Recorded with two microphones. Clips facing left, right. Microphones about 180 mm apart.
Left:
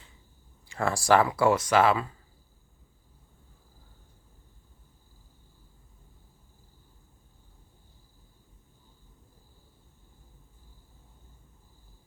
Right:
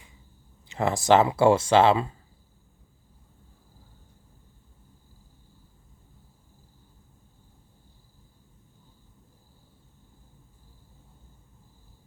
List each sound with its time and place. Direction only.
0.7 s speech: 20° right (ahead or behind)